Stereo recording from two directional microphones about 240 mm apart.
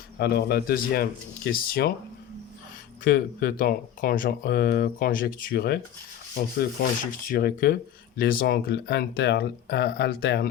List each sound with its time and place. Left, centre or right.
0.2 s speech: left
3.0 s speech: left